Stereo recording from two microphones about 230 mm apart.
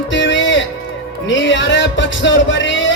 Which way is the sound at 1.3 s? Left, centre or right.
Left.